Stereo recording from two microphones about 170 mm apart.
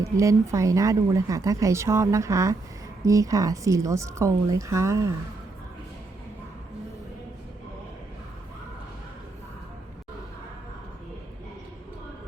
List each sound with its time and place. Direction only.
0.0 s speech: 20° right (ahead or behind)